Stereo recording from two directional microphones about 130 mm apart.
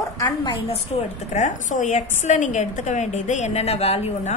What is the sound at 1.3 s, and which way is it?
A woman's voice, 70° left (ahead or behind).